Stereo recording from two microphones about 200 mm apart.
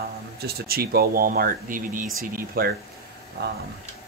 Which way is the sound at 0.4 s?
50° right (ahead or behind).